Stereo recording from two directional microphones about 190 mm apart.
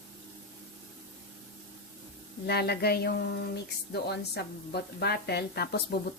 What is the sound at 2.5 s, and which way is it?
Speech, 60° left (ahead or behind).